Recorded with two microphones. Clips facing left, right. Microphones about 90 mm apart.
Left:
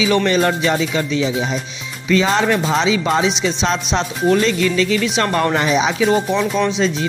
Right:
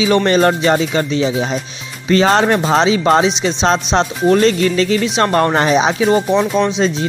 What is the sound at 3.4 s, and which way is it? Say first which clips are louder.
Speech: right 4 dB; 35° right (ahead or behind).